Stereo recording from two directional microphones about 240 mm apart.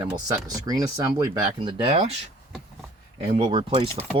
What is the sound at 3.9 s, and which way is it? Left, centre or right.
Speech, centre.